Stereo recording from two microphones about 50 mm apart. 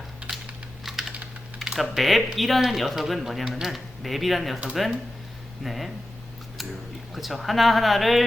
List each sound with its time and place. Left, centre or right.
0.9 s computer keyboard: centre
1.6 s speech: centre
7.1 s speech: centre